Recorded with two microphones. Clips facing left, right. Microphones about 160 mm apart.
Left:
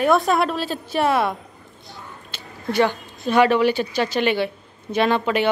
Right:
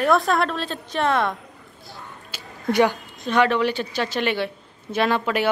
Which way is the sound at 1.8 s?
Centre (ahead or behind).